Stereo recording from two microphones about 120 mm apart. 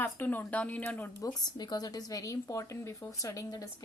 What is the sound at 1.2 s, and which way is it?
A woman's voice, 35° left (ahead or behind).